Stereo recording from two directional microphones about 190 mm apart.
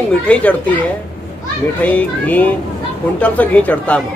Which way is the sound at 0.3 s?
5° left (ahead or behind).